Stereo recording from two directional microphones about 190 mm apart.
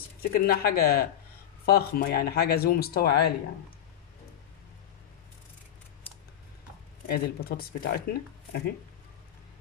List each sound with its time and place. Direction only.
0.2 s speech: 50° left (ahead or behind)
7.1 s speech: 50° left (ahead or behind)